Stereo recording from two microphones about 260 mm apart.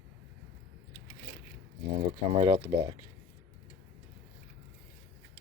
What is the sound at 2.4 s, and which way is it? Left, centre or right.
Speech, centre.